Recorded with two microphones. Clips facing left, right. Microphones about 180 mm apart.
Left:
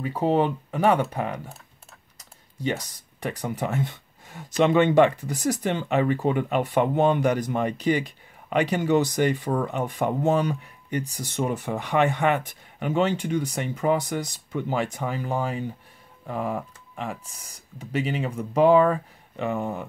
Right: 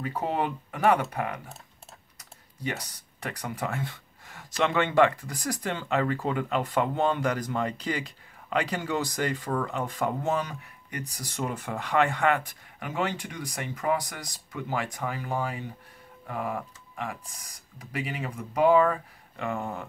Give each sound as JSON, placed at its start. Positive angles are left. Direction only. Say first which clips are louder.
{"t": 0.0, "sound": "speech", "louder": "left 7 dB", "side_deg": 20}
{"t": 2.6, "sound": "speech", "louder": "left 6 dB", "side_deg": 25}
{"t": 17.7, "sound": "speech", "louder": "left 7 dB", "side_deg": 25}